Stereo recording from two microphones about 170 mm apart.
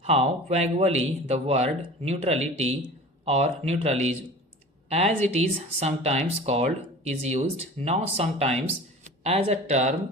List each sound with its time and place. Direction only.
0.0 s speech: 40° right (ahead or behind)